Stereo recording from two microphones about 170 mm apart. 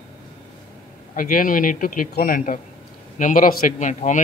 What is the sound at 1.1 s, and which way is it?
A man's voice, 55° left (ahead or behind).